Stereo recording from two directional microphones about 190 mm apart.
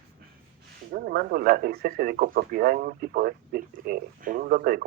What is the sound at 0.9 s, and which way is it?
Speech, 50° right (ahead or behind).